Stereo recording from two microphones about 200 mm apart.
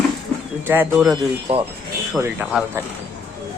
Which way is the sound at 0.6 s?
10° right (ahead or behind).